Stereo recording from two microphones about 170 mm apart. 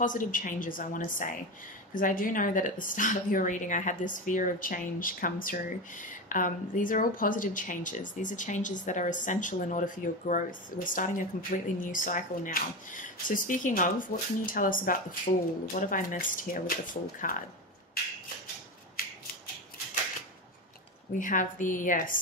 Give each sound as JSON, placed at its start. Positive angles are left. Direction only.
{"t": 0.0, "sound": "a woman's voice", "side_deg": 50}
{"t": 19.0, "sound": "scissors", "side_deg": 60}
{"t": 21.2, "sound": "a woman's voice", "side_deg": 50}